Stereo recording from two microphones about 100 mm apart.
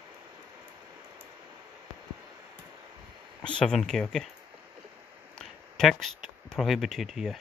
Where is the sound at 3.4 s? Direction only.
5° left (ahead or behind).